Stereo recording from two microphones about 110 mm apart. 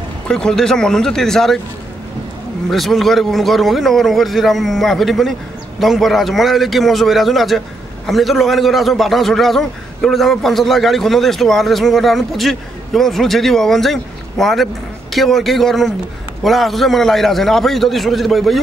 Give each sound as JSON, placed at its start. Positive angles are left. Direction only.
{"t": 0.3, "sound": "a man's voice", "side_deg": 5}
{"t": 2.7, "sound": "a man's voice", "side_deg": 0}